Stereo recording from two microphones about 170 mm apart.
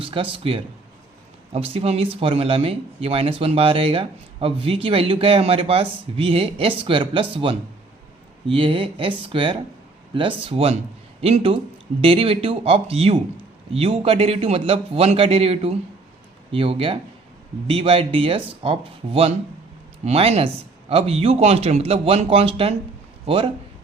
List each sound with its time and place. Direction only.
0.0 s a man's voice: 35° right (ahead or behind)